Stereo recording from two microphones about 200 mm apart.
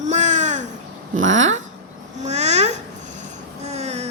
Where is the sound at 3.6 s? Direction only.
35° right (ahead or behind).